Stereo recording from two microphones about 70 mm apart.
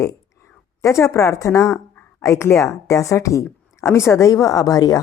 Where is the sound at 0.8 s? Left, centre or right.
Left.